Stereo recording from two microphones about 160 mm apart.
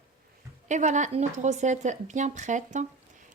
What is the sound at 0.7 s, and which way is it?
A woman's voice, 50° right (ahead or behind).